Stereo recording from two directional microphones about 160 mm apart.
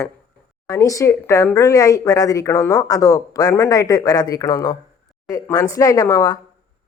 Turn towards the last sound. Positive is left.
turn(degrees=20)  # may be behind; listen again after turning